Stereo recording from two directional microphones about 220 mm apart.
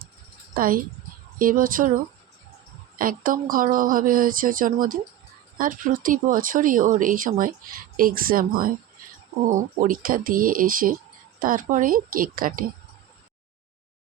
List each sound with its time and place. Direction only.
0.5 s speech: 40° right (ahead or behind)
3.0 s speech: 40° right (ahead or behind)
9.5 s speech: 35° right (ahead or behind)